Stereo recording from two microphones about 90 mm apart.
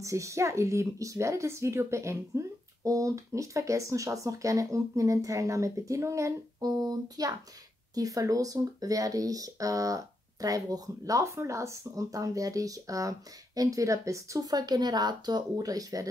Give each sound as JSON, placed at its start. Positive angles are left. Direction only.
{"t": 0.0, "sound": "speech", "side_deg": -35}